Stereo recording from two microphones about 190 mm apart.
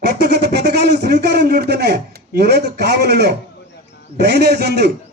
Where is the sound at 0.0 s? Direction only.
60° right (ahead or behind).